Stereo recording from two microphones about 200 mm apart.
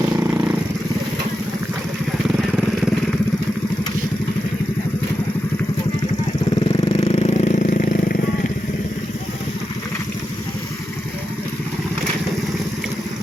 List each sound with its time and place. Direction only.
6.8 s vehicle: 30° left (ahead or behind)